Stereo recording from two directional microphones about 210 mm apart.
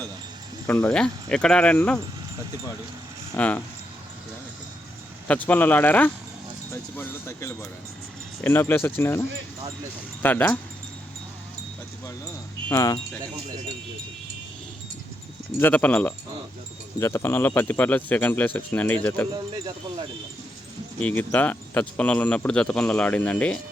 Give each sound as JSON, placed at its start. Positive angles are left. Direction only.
{"t": 0.7, "sound": "speech", "side_deg": 5}
{"t": 3.3, "sound": "speech", "side_deg": 10}
{"t": 5.3, "sound": "speech", "side_deg": 5}
{"t": 10.2, "sound": "speech", "side_deg": 10}
{"t": 12.6, "sound": "speech", "side_deg": 15}
{"t": 15.5, "sound": "speech", "side_deg": 10}
{"t": 21.0, "sound": "speech", "side_deg": 10}